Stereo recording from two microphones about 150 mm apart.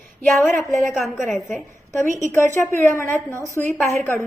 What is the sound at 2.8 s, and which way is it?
Speech, 15° left (ahead or behind).